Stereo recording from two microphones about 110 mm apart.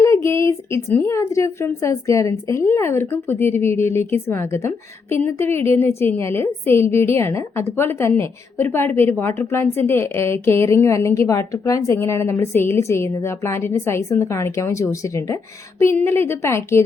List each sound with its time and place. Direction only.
0.0 s speech: 25° left (ahead or behind)